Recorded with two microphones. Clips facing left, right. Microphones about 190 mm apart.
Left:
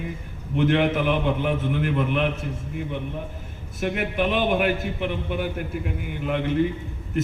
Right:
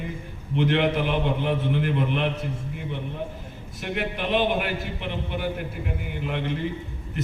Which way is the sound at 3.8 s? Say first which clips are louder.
Left 5 dB; 50° left (ahead or behind).